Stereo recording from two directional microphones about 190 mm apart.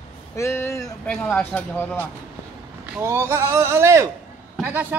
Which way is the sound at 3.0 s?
15° right (ahead or behind).